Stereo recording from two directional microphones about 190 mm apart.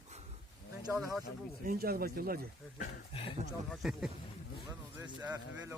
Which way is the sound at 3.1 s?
30° left (ahead or behind).